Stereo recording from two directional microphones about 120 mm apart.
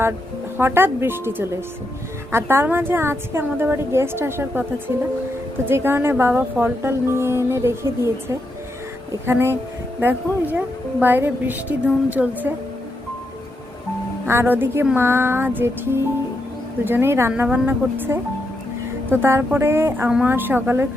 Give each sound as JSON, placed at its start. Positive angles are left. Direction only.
{"t": 0.5, "sound": "a woman's voice", "side_deg": -20}
{"t": 5.6, "sound": "a woman's voice", "side_deg": -20}
{"t": 14.3, "sound": "a woman's voice", "side_deg": -20}